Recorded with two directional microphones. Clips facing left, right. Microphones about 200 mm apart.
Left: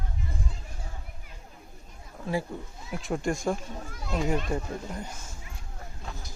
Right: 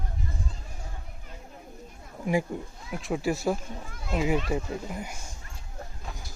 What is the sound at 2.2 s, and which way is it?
Speech, 15° right (ahead or behind).